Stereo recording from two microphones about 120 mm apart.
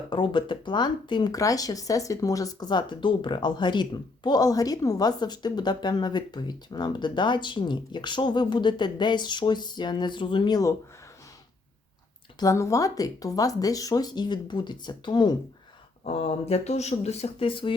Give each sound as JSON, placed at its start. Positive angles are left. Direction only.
{"t": 0.1, "sound": "speech", "side_deg": 40}
{"t": 12.4, "sound": "speech", "side_deg": 25}
{"t": 16.0, "sound": "speech", "side_deg": 60}